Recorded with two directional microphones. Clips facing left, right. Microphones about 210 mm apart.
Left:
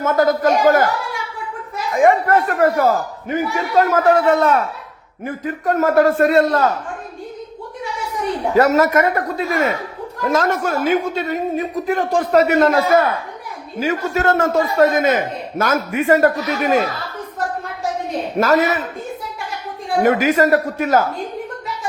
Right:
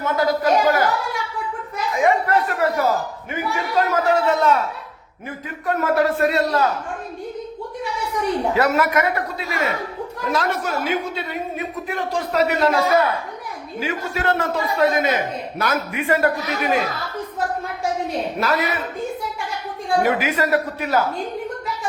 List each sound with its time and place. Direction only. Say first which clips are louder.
0.0 s a sound: left 4 dB; 45° left (ahead or behind)
2.0 s a sound: left 4 dB; 50° left (ahead or behind)
3.8 s a man's voice: left 5 dB; 55° left (ahead or behind)
8.5 s a man's voice: left 8 dB; 45° left (ahead or behind)
18.3 s a man's voice: left 9 dB; 45° left (ahead or behind)
20.0 s a man's voice: left 7 dB; 45° left (ahead or behind)